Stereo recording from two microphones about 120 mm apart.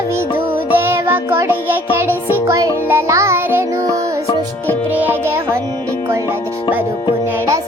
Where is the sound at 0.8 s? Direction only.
20° right (ahead or behind).